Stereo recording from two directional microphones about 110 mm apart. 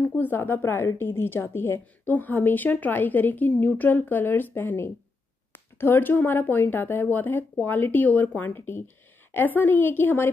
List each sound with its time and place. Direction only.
0.0 s a woman's voice: 15° left (ahead or behind)